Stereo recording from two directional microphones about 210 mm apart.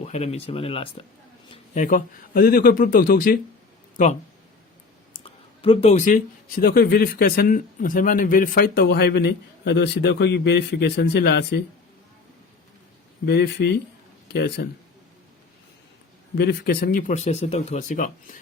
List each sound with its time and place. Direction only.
0.0 s speech: 30° left (ahead or behind)
5.1 s speech: 25° left (ahead or behind); by 11.6 s 50° left (ahead or behind)
13.2 s speech: 50° left (ahead or behind)
16.4 s speech: 50° left (ahead or behind)